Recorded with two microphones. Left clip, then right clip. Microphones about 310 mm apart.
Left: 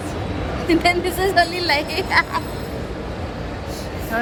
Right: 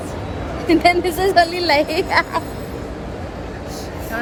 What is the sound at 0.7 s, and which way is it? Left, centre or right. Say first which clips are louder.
Speech: right 3 dB; centre.